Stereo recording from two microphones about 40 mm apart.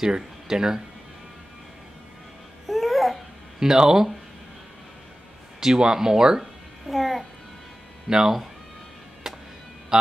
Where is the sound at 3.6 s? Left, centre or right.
Centre.